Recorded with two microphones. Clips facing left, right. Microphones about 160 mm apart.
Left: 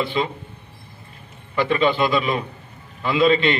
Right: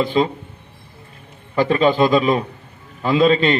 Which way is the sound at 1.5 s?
40° right (ahead or behind).